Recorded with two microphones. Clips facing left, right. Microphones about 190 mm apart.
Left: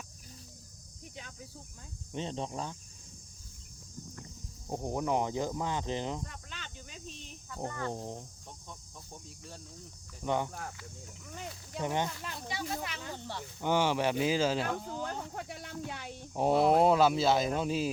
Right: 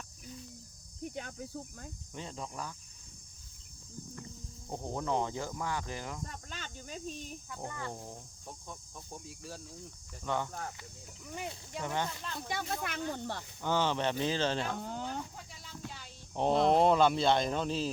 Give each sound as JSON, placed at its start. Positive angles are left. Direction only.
{"t": 1.0, "sound": "speech", "side_deg": -50}
{"t": 2.1, "sound": "speech", "side_deg": 25}
{"t": 4.7, "sound": "speech", "side_deg": 15}
{"t": 6.2, "sound": "cricket", "side_deg": -40}
{"t": 7.6, "sound": "cricket", "side_deg": -10}
{"t": 7.9, "sound": "speech", "side_deg": 20}
{"t": 9.2, "sound": "speech", "side_deg": -5}
{"t": 10.2, "sound": "speech", "side_deg": 15}
{"t": 11.8, "sound": "speech", "side_deg": 15}
{"t": 12.5, "sound": "speech", "side_deg": -50}
{"t": 13.6, "sound": "speech", "side_deg": 15}
{"t": 15.0, "sound": "speech", "side_deg": 65}
{"t": 16.3, "sound": "speech", "side_deg": 10}